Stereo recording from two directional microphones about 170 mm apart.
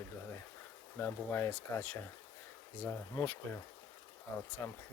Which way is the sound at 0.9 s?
15° left (ahead or behind).